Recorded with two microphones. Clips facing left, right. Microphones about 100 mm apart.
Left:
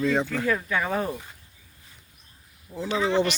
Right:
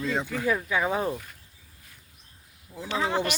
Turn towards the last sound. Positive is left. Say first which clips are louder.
# left 3 dB
turn(degrees=-5)  # may be behind; listen again after turning